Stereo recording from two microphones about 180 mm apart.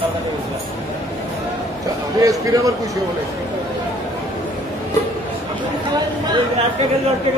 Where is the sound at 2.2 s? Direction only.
20° right (ahead or behind).